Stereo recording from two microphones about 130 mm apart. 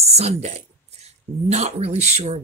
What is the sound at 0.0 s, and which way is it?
Speech, 55° right (ahead or behind).